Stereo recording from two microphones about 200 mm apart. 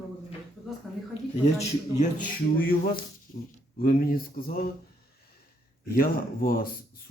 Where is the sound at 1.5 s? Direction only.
40° left (ahead or behind).